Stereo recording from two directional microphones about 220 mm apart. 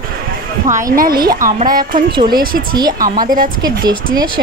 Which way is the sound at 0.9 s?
40° right (ahead or behind).